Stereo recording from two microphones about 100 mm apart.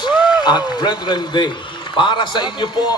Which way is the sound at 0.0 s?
45° left (ahead or behind).